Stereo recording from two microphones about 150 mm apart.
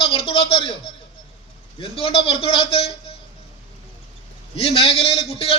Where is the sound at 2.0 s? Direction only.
40° left (ahead or behind).